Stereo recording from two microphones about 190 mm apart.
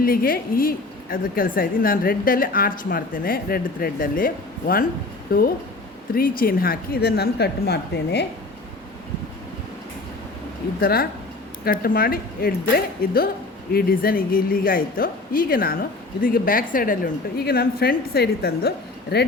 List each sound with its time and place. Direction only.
0.0 s a woman's voice: 50° left (ahead or behind)
10.8 s a woman's voice: 50° left (ahead or behind)